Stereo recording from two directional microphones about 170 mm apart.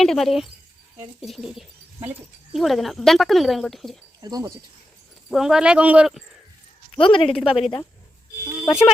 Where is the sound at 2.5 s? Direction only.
Centre (ahead or behind).